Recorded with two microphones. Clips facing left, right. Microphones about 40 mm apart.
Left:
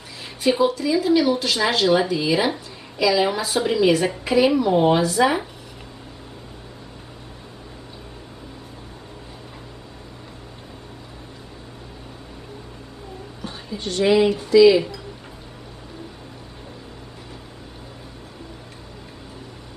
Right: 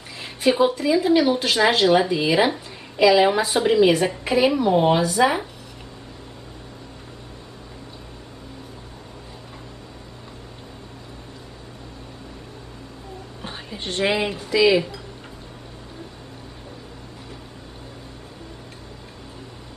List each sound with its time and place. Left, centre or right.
0.6 s a woman's voice: centre
13.4 s a sound: right
14.0 s a woman's voice: centre